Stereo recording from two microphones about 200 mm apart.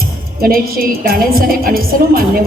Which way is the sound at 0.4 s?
45° right (ahead or behind).